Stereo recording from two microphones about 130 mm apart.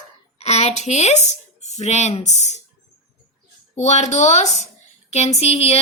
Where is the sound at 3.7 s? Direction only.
60° left (ahead or behind).